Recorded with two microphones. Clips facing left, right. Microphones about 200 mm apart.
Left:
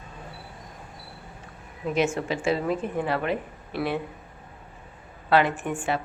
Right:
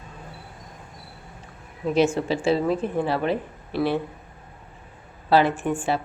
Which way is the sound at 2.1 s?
30° right (ahead or behind).